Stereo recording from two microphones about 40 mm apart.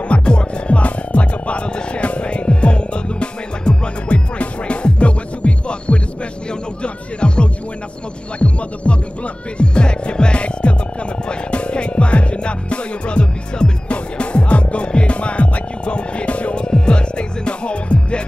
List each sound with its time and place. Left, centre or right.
0.1 s music: left
8.8 s music: left
16.6 s music: left